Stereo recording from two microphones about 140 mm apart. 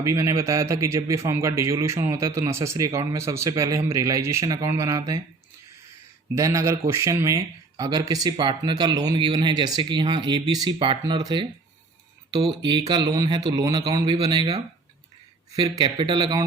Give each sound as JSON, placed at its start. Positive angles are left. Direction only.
{"t": 0.0, "sound": "a man's voice", "side_deg": -20}
{"t": 6.3, "sound": "a man's voice", "side_deg": -20}